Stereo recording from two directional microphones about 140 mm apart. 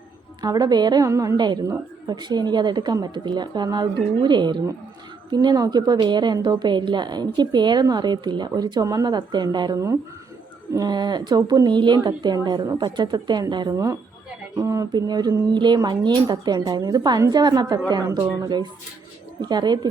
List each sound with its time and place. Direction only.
0.4 s a woman's voice: 30° right (ahead or behind)